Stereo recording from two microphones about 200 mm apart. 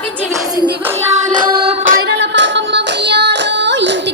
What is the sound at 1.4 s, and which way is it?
Music, 25° right (ahead or behind).